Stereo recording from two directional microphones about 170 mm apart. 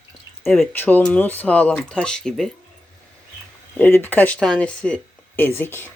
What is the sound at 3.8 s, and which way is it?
Speech, 10° left (ahead or behind).